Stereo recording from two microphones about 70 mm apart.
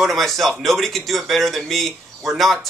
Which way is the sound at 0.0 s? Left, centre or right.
Centre.